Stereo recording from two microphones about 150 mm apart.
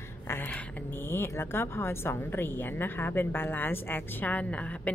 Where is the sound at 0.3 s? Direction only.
10° left (ahead or behind).